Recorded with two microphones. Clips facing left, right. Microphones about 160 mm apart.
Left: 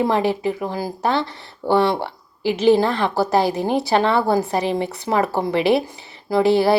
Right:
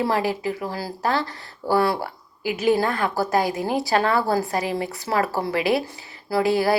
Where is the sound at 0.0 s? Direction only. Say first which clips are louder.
Left 4 dB; 20° left (ahead or behind).